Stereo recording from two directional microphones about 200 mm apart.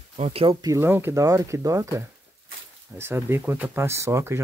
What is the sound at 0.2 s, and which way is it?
Speech, 30° right (ahead or behind).